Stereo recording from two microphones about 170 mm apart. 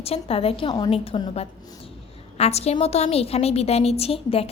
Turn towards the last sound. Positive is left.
turn(degrees=35)  # may be behind; listen again after turning